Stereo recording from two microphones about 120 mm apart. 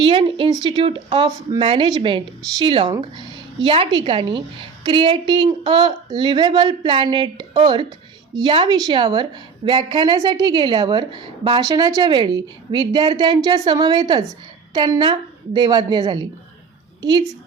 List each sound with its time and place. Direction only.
0.0 s a woman's voice: 45° right (ahead or behind)